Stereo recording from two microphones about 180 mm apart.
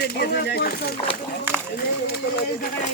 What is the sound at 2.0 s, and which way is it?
Speech, 60° left (ahead or behind).